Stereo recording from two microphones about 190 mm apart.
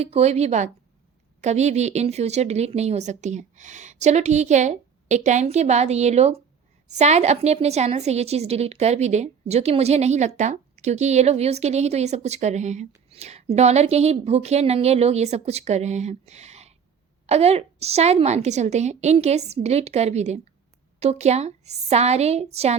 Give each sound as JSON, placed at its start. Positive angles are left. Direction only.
{"t": 0.0, "sound": "a woman's voice", "side_deg": -35}